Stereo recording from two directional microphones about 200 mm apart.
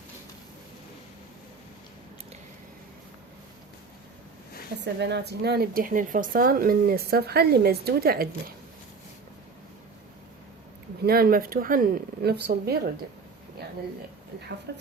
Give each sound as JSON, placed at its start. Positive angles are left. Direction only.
{"t": 4.8, "sound": "speech", "side_deg": -60}
{"t": 11.0, "sound": "speech", "side_deg": -50}
{"t": 14.7, "sound": "a woman's voice", "side_deg": -55}